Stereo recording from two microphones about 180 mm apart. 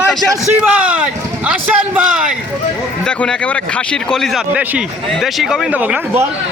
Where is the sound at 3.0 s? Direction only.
5° left (ahead or behind); by 6.3 s 10° right (ahead or behind).